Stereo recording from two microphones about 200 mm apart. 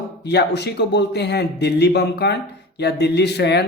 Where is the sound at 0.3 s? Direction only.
55° left (ahead or behind).